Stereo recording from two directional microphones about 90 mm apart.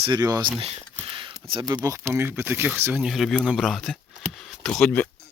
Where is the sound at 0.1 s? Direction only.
45° right (ahead or behind).